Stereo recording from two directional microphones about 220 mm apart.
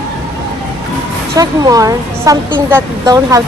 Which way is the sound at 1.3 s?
15° right (ahead or behind).